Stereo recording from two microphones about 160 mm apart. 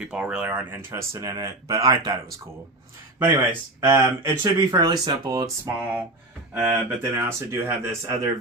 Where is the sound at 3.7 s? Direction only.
20° right (ahead or behind).